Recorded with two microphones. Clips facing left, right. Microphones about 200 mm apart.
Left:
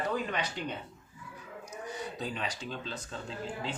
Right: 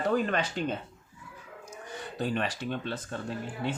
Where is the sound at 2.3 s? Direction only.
65° right (ahead or behind).